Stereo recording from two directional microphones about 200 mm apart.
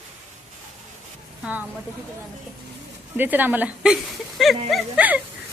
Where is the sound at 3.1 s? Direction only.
10° right (ahead or behind).